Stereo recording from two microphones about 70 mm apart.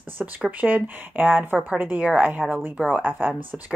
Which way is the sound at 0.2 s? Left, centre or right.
Right.